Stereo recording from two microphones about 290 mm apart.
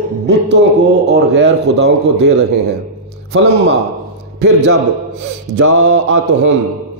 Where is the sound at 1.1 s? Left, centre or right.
Right.